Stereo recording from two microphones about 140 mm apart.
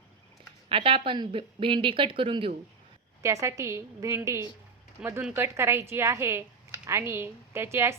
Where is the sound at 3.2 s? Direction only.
20° right (ahead or behind).